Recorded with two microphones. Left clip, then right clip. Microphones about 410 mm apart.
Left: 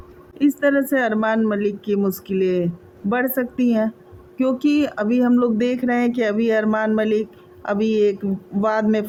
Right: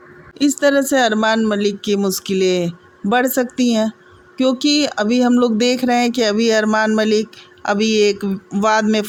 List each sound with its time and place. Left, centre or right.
0.3 s speech: left